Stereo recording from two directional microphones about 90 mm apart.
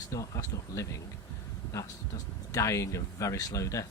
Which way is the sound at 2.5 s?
35° left (ahead or behind).